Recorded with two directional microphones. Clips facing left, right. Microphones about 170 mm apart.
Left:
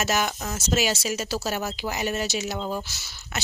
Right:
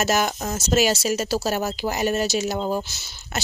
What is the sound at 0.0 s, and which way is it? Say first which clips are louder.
Speech: right 4 dB; 40° right (ahead or behind).